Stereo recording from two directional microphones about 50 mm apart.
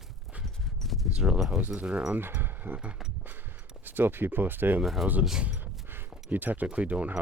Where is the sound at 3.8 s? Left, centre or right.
Right.